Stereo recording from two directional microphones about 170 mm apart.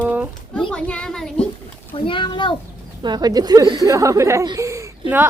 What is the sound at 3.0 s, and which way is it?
Speech, 25° right (ahead or behind).